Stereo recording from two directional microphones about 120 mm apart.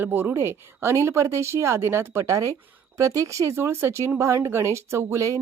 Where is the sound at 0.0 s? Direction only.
15° right (ahead or behind).